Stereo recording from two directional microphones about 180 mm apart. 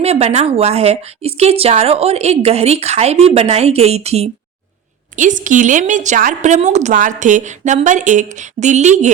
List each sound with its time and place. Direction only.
0.0 s a woman's voice: 35° right (ahead or behind)